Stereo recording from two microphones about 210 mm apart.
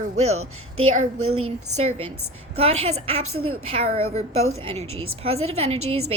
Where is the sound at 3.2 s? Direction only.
90° right.